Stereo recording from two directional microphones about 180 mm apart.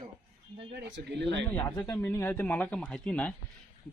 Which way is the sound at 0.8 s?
80° right.